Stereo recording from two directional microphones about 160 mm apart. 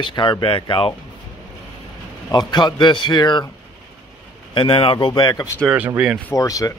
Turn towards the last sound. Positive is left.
turn(degrees=20)  # may be behind; listen again after turning